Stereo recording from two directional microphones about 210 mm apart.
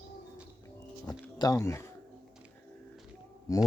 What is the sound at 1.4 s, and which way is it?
Speech, 15° left (ahead or behind).